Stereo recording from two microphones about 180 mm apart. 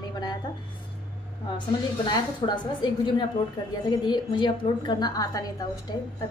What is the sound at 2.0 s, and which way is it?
A woman's voice, 25° left (ahead or behind).